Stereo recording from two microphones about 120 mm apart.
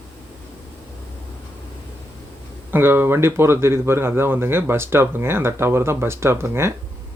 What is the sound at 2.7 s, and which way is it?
Speech, 20° right (ahead or behind).